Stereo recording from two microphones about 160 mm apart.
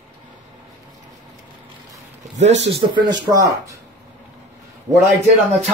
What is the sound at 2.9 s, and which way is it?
Speech, 25° right (ahead or behind).